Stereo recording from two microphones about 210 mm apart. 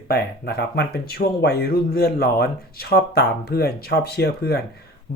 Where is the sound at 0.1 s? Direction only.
50° left (ahead or behind).